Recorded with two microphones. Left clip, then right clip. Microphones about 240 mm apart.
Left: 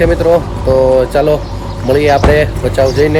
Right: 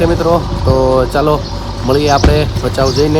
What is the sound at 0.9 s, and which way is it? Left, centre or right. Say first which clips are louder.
Speech: left 2 dB; centre.